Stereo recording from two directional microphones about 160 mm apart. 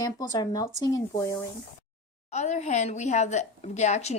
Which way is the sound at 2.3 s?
45° left (ahead or behind).